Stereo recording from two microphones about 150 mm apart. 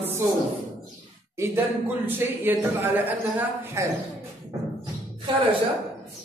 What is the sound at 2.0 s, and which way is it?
A man's voice, 15° right (ahead or behind).